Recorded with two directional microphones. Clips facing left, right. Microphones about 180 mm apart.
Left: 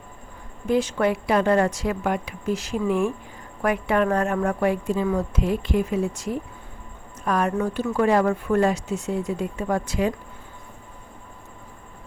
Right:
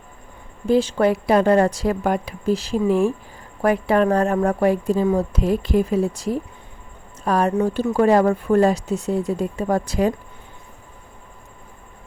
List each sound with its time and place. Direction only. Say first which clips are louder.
0.7 s a woman's voice: right 4 dB; 30° right (ahead or behind)